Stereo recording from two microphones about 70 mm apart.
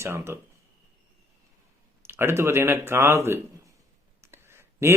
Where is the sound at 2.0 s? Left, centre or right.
Right.